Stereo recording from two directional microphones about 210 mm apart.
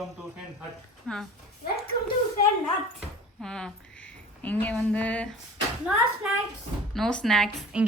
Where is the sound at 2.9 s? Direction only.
5° left (ahead or behind).